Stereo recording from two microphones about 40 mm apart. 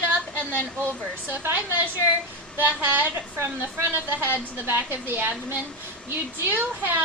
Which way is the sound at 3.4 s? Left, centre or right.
Right.